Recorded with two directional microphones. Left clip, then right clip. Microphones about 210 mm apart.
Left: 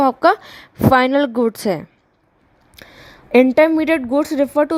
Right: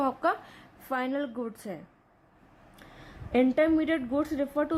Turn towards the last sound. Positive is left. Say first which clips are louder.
# left 13 dB
turn(degrees=45)  # may be behind; listen again after turning